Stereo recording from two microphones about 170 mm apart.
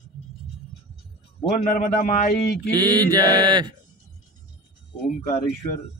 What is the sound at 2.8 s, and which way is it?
Mantra, 25° right (ahead or behind).